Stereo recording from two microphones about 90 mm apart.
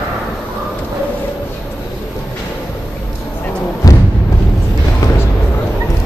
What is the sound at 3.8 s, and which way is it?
Thump, 40° left (ahead or behind).